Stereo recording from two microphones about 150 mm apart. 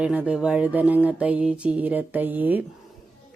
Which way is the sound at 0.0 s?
5° right (ahead or behind).